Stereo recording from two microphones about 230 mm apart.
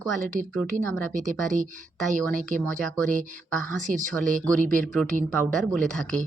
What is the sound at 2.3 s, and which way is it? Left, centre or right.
Speech, right.